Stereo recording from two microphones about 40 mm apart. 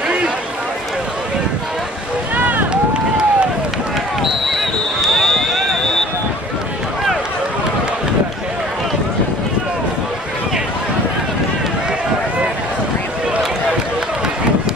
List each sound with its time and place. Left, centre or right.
2.3 s run: right
2.7 s run: right
4.2 s basketball bounce: centre
4.6 s a sound: centre